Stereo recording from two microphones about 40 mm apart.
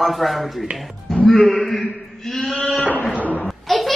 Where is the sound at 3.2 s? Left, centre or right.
Left.